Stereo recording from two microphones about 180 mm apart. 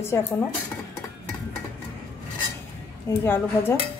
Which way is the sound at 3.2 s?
10° left (ahead or behind).